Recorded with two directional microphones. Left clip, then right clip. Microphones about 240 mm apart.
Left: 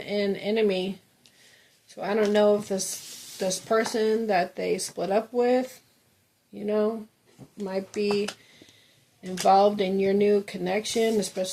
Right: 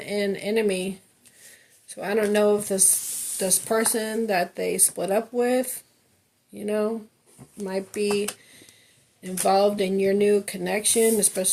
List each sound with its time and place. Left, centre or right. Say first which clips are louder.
0.0 s speech: right 1 dB; right